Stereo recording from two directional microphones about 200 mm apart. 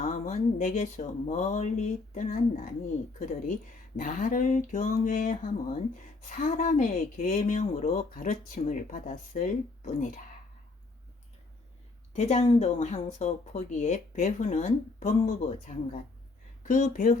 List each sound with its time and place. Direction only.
0.0 s speech: 40° left (ahead or behind)
3.9 s speech: 45° left (ahead or behind)
12.1 s speech: 35° left (ahead or behind)